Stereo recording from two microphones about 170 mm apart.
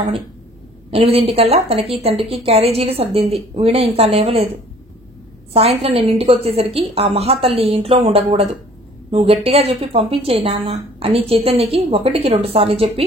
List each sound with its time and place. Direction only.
0.8 s speech: 35° right (ahead or behind)
5.5 s speech: 35° right (ahead or behind)